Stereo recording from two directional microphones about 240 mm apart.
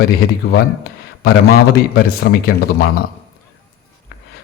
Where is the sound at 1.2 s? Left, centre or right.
Left.